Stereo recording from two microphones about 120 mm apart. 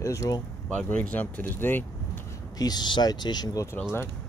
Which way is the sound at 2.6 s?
35° left (ahead or behind).